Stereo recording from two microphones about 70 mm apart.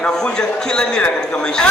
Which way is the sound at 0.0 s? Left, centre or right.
Centre.